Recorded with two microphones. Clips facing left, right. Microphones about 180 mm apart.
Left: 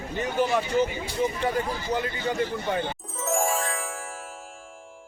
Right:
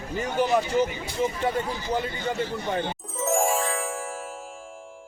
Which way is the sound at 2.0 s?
Centre (ahead or behind).